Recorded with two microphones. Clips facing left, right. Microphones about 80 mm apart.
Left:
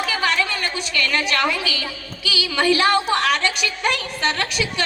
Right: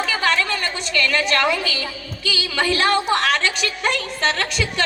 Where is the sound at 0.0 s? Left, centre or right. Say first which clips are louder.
Right 1 dB; right.